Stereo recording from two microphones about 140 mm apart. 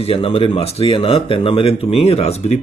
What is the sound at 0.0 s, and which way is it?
Speech, 40° left (ahead or behind).